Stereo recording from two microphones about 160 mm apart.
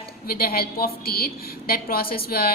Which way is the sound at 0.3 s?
70° left (ahead or behind).